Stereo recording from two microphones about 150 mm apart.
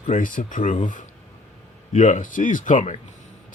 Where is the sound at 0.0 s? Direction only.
60° left (ahead or behind).